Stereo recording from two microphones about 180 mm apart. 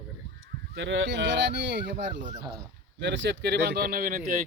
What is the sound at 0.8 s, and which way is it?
Speech, 85° right.